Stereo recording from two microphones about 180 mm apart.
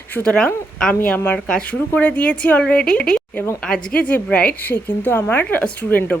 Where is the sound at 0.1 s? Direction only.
5° left (ahead or behind).